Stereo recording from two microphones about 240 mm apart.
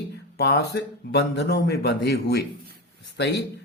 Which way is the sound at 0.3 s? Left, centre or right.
Left.